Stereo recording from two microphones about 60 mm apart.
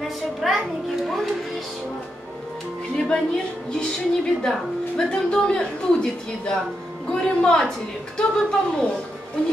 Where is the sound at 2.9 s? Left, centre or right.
Centre.